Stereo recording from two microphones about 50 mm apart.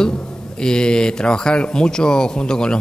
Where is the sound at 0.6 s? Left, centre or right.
Centre.